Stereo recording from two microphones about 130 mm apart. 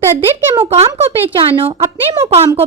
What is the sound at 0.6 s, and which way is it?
Speech, 50° right (ahead or behind).